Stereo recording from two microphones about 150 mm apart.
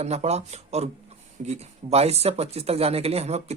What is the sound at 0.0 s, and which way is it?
Speech, 45° right (ahead or behind).